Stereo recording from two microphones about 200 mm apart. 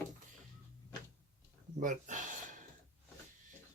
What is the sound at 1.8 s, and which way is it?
Speech, 40° right (ahead or behind).